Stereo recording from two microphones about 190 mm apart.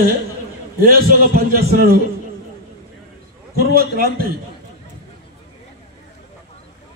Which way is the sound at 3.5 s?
55° right (ahead or behind).